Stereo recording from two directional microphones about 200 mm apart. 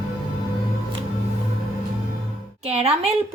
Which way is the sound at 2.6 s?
30° right (ahead or behind).